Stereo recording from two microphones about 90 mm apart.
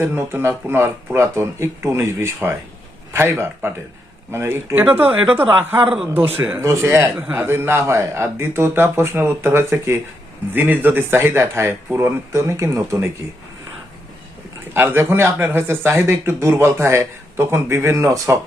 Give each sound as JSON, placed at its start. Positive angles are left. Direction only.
{"t": 0.0, "sound": "speech", "side_deg": -25}
{"t": 14.7, "sound": "speech", "side_deg": -25}